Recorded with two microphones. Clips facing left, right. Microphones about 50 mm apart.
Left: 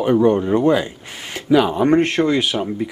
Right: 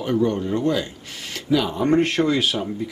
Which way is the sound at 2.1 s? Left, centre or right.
Centre.